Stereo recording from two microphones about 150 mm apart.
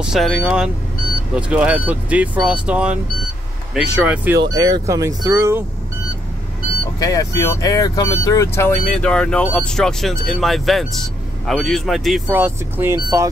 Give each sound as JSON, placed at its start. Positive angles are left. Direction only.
{"t": 0.0, "sound": "speech", "side_deg": -5}
{"t": 4.4, "sound": "speech", "side_deg": -25}
{"t": 7.0, "sound": "speech", "side_deg": 25}
{"t": 9.1, "sound": "speech", "side_deg": 5}
{"t": 12.3, "sound": "speech", "side_deg": -15}